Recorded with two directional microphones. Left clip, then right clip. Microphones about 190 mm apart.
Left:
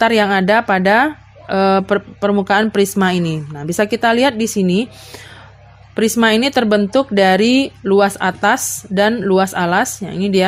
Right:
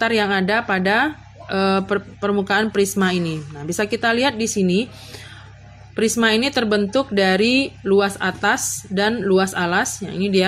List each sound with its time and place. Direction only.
0.0 s speech: 40° left (ahead or behind)
6.0 s speech: 40° left (ahead or behind)